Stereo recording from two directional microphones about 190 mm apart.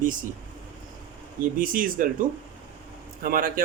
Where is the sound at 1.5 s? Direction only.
45° right (ahead or behind).